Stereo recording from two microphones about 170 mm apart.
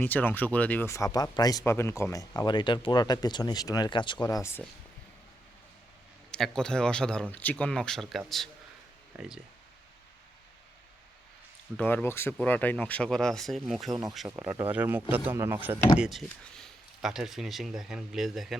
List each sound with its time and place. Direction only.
0.0 s speech: 10° left (ahead or behind)
6.3 s speech: 5° left (ahead or behind)
11.8 s speech: 10° left (ahead or behind)
14.3 s speech: 10° right (ahead or behind)
16.0 s speech: centre (ahead or behind)